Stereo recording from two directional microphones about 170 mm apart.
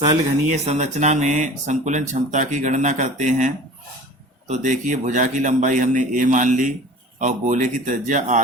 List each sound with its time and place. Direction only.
0.4 s speech: 40° right (ahead or behind)